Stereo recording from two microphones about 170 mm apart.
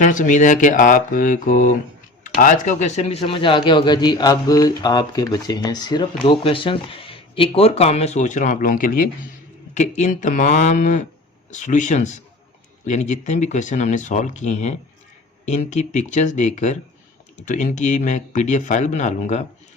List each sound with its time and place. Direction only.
0.0 s speech: 50° left (ahead or behind)
9.7 s speech: 45° left (ahead or behind)